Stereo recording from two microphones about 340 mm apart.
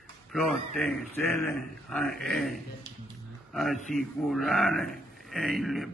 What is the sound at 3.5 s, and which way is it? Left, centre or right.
A man's voice, centre.